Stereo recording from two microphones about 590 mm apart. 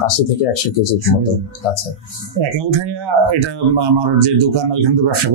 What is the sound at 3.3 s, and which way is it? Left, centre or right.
Speech, right.